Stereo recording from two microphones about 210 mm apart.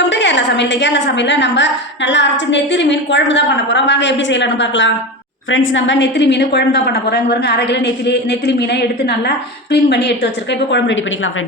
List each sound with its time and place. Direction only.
0.1 s a woman's voice: 60° left (ahead or behind)